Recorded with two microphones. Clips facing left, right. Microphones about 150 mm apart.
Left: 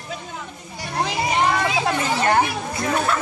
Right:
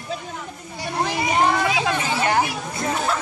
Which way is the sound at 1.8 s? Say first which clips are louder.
Left 2 dB; 50° left (ahead or behind).